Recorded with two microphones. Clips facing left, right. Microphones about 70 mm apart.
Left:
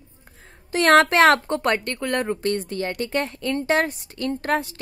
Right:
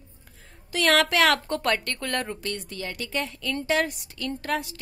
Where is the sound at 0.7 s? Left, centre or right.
Left.